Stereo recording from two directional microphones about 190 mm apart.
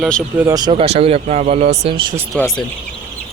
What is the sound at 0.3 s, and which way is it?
Speech, 20° right (ahead or behind).